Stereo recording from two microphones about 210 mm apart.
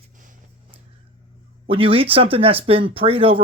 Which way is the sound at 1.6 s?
25° right (ahead or behind).